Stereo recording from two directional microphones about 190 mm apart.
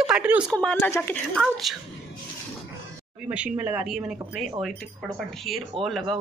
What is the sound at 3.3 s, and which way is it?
Speech, 10° right (ahead or behind).